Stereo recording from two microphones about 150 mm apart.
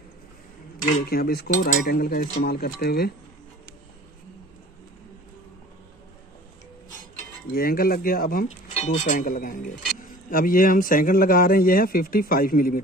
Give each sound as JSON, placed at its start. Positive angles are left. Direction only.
{"t": 1.0, "sound": "cutlery", "side_deg": 90}
{"t": 7.5, "sound": "a man's voice", "side_deg": 75}
{"t": 8.7, "sound": "a man's voice", "side_deg": 50}